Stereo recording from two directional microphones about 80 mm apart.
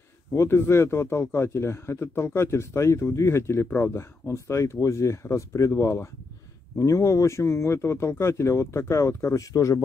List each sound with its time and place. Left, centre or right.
0.3 s speech: left